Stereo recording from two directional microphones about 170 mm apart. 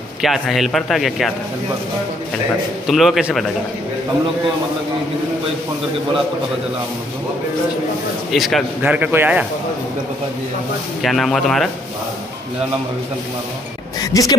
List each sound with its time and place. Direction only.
0.2 s speech: centre (ahead or behind)
2.9 s speech: centre (ahead or behind)
8.3 s a man's voice: centre (ahead or behind)
11.0 s speech: centre (ahead or behind)
13.9 s speech: 20° left (ahead or behind)